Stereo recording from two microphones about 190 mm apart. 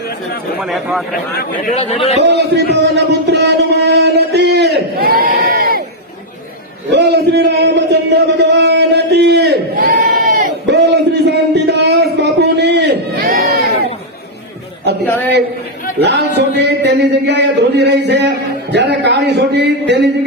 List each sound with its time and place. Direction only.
0.6 s speech: centre (ahead or behind)
1.7 s speech: 35° left (ahead or behind)
2.2 s speech: 60° right (ahead or behind)
6.9 s a sound: 65° right (ahead or behind)
12.2 s crowd: 60° right (ahead or behind)
16.0 s speech: 65° right (ahead or behind)